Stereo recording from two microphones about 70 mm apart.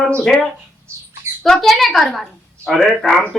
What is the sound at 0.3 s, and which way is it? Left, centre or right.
Speech, centre.